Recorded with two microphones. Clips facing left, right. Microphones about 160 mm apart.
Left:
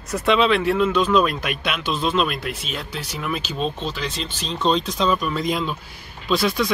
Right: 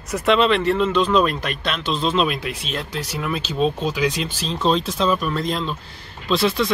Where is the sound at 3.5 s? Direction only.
5° right (ahead or behind).